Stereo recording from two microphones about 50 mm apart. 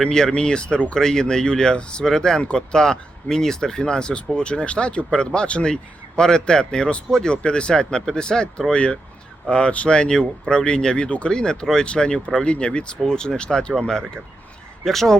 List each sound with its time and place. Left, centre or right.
0.0 s speech: centre